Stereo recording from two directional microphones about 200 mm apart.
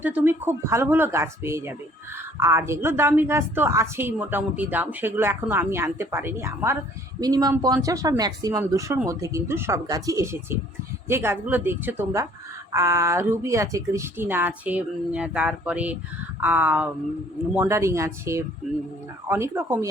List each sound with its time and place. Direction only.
0.0 s a woman's voice: 10° right (ahead or behind)